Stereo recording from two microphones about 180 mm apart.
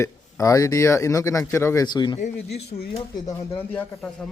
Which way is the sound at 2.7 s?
60° left (ahead or behind).